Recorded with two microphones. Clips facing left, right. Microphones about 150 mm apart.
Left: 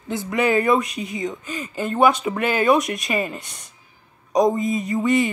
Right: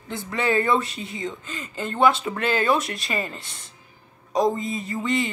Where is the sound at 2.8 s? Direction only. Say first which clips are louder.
Left 5 dB; 30° right (ahead or behind).